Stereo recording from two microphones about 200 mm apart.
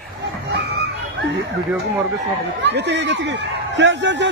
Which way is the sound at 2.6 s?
60° right (ahead or behind).